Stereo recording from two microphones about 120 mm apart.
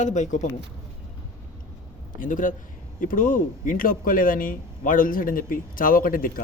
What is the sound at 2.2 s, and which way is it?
Speech, 90° left.